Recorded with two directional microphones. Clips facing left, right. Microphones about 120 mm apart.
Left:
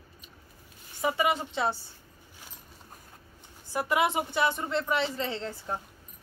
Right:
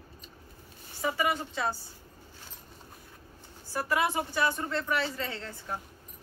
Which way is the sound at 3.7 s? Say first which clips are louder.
Left 2 dB; 20° left (ahead or behind).